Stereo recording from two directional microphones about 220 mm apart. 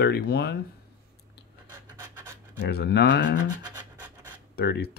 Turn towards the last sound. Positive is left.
turn(degrees=45)  # may be behind; listen again after turning